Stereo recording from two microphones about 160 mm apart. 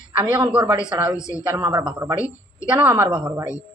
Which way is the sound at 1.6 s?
20° right (ahead or behind).